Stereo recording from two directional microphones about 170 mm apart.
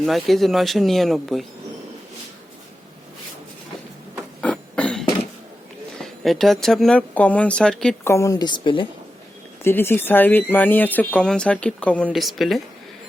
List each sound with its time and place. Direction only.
0.0 s speech: centre (ahead or behind)
4.4 s a sound: 5° left (ahead or behind)
6.0 s speech: centre (ahead or behind)
8.0 s a woman's voice: 15° left (ahead or behind)
9.6 s speech: 15° left (ahead or behind)